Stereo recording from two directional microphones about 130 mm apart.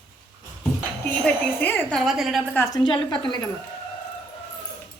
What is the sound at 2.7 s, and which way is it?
Speech, 35° left (ahead or behind).